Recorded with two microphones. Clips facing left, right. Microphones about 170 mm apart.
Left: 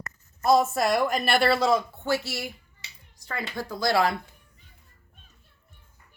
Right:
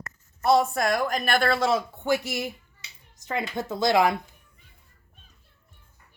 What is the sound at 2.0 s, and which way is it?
Speech, 15° right (ahead or behind).